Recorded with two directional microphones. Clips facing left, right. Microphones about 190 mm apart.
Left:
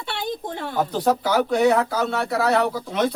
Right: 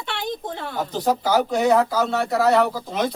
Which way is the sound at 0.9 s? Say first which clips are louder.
Right 1 dB; 65° left (ahead or behind).